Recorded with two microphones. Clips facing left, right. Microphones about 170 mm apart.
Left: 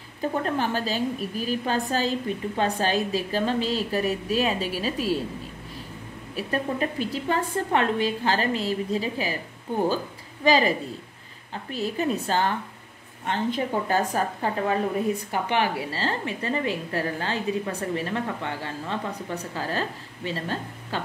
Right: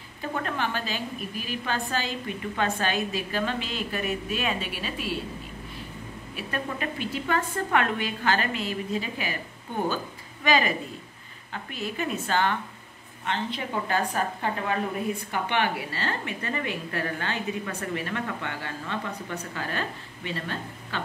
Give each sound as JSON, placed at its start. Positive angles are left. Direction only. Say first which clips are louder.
{"t": 0.2, "sound": "a woman's voice", "louder": "left 4 dB", "side_deg": 35}
{"t": 6.3, "sound": "a woman's voice", "louder": "left 5 dB", "side_deg": 35}
{"t": 10.4, "sound": "a woman's voice", "louder": "left 3 dB", "side_deg": 30}
{"t": 11.7, "sound": "a woman's voice", "louder": "left 5 dB", "side_deg": 35}